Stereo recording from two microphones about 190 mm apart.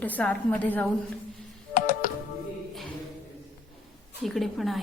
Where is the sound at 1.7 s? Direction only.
45° left (ahead or behind).